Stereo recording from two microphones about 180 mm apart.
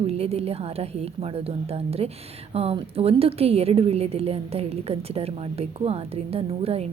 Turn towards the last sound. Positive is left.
turn(degrees=-35)  # may be behind; listen again after turning